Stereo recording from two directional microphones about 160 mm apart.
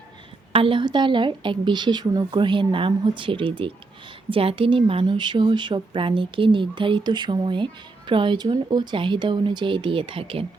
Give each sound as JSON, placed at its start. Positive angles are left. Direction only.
{"t": 0.5, "sound": "a woman's voice", "side_deg": -35}